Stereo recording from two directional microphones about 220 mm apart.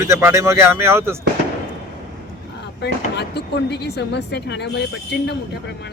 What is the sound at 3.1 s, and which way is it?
A woman's voice, 50° left (ahead or behind).